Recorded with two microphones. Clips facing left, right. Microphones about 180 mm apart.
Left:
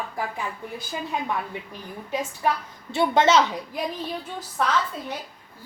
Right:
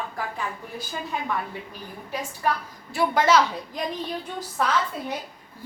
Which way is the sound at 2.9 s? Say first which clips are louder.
Left 1 dB; 25° left (ahead or behind).